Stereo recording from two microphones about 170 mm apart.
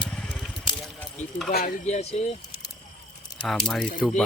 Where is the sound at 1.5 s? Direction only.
55° left (ahead or behind).